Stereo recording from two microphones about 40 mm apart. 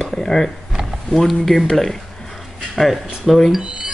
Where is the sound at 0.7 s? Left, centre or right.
Centre.